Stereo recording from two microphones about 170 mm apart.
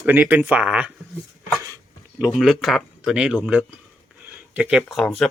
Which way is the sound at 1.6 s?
20° right (ahead or behind).